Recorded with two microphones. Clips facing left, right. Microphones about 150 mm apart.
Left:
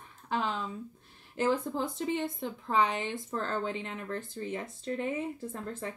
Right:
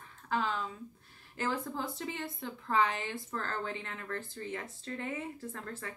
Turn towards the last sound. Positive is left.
turn(degrees=20)  # may be behind; listen again after turning